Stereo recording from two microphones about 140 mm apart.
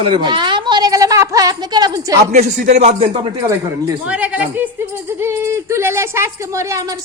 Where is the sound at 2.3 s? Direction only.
60° right (ahead or behind).